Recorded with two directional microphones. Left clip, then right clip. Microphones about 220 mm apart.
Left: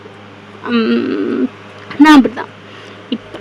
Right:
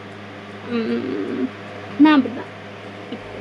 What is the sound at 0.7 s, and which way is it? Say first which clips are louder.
Speech: left 9 dB; 30° left (ahead or behind).